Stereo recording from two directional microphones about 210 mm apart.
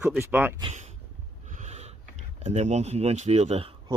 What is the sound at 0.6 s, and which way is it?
Speech, 30° right (ahead or behind).